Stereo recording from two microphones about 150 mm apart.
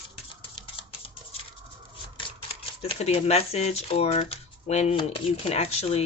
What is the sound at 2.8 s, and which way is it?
A woman's voice, 45° left (ahead or behind).